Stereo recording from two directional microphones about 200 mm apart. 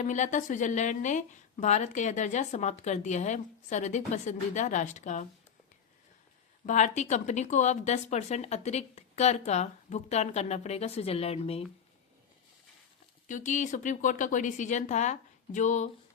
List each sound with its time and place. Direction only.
0.0 s a woman's voice: 35° left (ahead or behind)
6.7 s a woman's voice: 35° left (ahead or behind)
13.2 s a woman's voice: 40° left (ahead or behind)